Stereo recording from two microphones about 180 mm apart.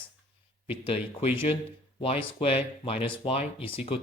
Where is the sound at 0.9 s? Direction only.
35° left (ahead or behind).